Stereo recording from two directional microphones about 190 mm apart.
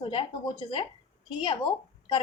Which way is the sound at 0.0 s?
25° left (ahead or behind).